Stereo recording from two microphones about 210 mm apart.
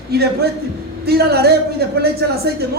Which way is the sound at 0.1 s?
50° right (ahead or behind).